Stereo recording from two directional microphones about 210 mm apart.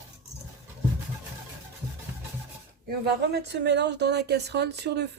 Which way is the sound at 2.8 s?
50° right (ahead or behind).